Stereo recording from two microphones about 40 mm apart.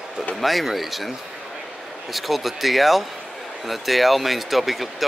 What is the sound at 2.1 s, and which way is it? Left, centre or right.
Speech, centre.